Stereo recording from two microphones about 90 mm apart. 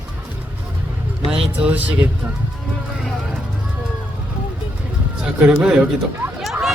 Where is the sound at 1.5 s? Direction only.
15° right (ahead or behind).